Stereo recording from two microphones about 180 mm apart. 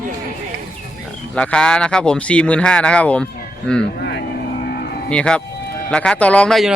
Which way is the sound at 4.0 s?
65° left (ahead or behind).